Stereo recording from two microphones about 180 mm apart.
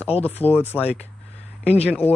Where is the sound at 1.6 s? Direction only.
35° left (ahead or behind).